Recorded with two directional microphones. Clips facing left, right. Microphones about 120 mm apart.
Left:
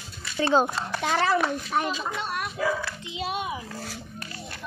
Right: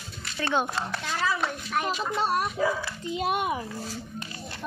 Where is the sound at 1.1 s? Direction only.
70° left (ahead or behind).